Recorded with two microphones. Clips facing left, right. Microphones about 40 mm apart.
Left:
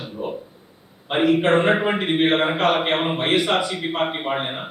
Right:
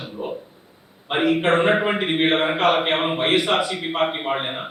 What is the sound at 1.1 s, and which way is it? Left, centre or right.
A man's voice, centre.